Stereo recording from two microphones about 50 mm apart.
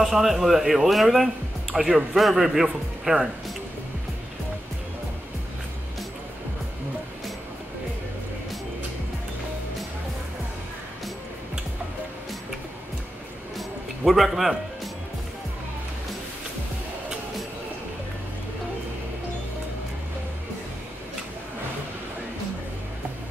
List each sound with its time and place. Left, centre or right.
0.0 s speech: centre
13.6 s music: centre